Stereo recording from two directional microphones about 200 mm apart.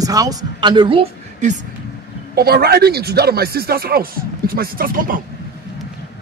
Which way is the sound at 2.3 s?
50° right (ahead or behind).